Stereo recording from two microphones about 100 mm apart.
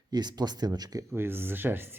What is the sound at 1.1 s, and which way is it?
Speech, 25° right (ahead or behind).